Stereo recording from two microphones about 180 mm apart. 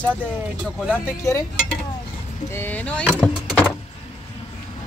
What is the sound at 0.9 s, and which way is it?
Speech, 15° left (ahead or behind).